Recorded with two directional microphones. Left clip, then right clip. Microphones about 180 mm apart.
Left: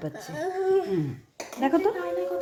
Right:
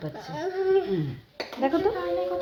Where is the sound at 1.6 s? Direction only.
35° left (ahead or behind).